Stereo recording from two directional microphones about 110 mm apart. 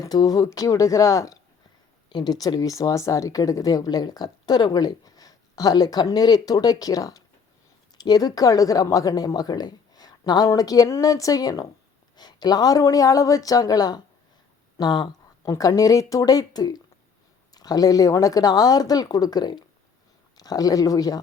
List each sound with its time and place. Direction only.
0.0 s speech: 35° left (ahead or behind)